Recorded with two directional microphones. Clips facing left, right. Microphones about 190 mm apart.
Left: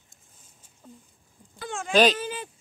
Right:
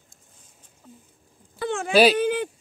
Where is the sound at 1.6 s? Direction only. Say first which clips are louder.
Right 8 dB; 60° right (ahead or behind).